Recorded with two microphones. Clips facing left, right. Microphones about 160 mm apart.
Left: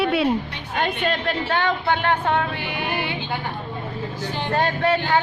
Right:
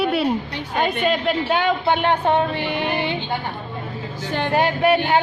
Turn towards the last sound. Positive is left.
turn(degrees=-15)  # may be behind; listen again after turning